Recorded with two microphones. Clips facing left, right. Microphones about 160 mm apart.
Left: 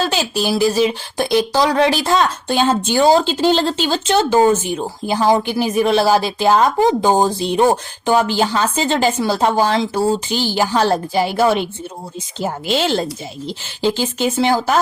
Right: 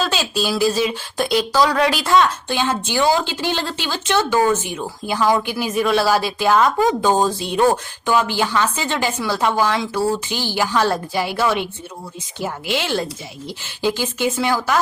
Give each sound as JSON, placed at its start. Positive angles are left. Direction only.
{"t": 0.1, "sound": "speech", "side_deg": 20}
{"t": 2.5, "sound": "speech", "side_deg": 40}
{"t": 7.0, "sound": "speech", "side_deg": 20}
{"t": 8.1, "sound": "speech", "side_deg": 35}